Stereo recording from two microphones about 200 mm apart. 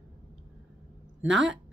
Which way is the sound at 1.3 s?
60° right (ahead or behind).